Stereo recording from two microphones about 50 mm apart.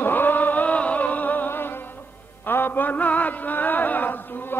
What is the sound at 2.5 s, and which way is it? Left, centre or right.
Music, left.